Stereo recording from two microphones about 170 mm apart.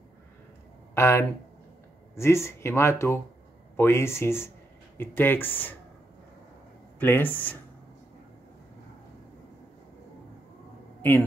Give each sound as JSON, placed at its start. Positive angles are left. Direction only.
{"t": 0.9, "sound": "speech", "side_deg": 15}
{"t": 7.0, "sound": "speech", "side_deg": 10}
{"t": 11.0, "sound": "speech", "side_deg": 10}